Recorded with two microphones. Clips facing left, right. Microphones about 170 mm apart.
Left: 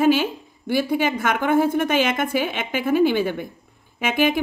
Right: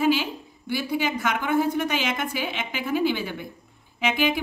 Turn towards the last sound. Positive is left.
turn(degrees=50)  # may be behind; listen again after turning